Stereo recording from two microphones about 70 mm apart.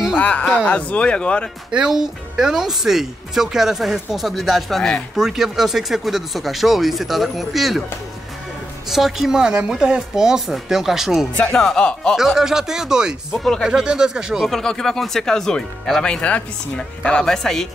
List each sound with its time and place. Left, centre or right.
0.2 s speech: centre
1.7 s speech: centre
5.1 s speech: centre
8.8 s speech: centre
11.5 s speech: centre
12.2 s speech: centre
13.4 s speech: centre
13.7 s speech: centre
14.5 s speech: centre